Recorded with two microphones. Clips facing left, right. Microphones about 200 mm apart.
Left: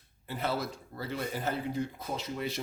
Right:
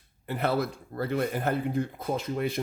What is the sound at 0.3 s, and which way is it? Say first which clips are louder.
Speech: right 6 dB; 60° right (ahead or behind).